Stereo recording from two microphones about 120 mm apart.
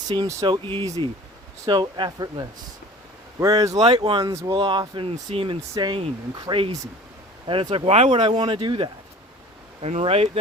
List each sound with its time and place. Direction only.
0.1 s speech: 30° right (ahead or behind)
0.4 s speech: 45° right (ahead or behind)
3.8 s speech: 40° right (ahead or behind)
4.3 s speech: 25° right (ahead or behind)
4.5 s speech: 40° right (ahead or behind)
5.7 s speech: 35° right (ahead or behind)
7.9 s speech: 55° right (ahead or behind)
9.8 s speech: 60° right (ahead or behind)